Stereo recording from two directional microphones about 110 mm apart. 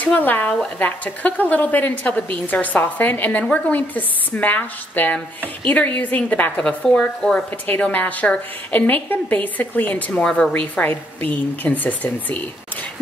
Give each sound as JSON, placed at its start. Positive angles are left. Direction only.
{"t": 0.0, "sound": "a woman's voice", "side_deg": 15}